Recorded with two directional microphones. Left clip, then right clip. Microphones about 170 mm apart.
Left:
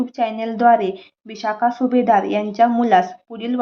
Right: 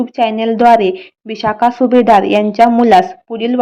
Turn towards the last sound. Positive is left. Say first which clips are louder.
# right 9 dB
turn(degrees=-30)  # may be behind; listen again after turning